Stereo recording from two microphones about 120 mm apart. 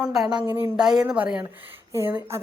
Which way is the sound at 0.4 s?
20° right (ahead or behind).